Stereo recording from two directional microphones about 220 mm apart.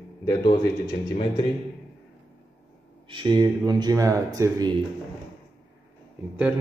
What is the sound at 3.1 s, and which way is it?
Speech, 20° right (ahead or behind).